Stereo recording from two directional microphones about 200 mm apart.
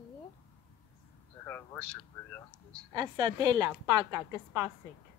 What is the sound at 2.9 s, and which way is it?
A woman's voice, 20° right (ahead or behind).